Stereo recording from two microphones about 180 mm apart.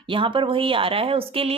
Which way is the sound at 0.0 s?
30° right (ahead or behind).